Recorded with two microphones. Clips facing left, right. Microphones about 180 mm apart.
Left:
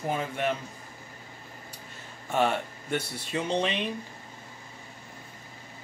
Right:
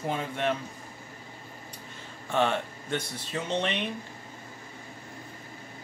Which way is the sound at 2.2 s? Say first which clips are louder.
Even; 10° left (ahead or behind).